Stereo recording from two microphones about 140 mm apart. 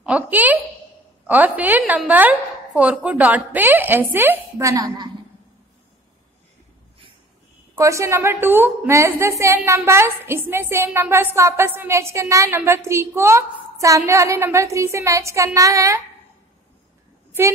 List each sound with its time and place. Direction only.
0.0 s a woman's voice: 10° right (ahead or behind); by 5.1 s 30° right (ahead or behind)
7.7 s a woman's voice: 20° right (ahead or behind)